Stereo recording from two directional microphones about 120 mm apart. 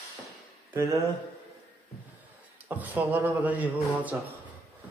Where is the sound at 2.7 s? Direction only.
15° right (ahead or behind).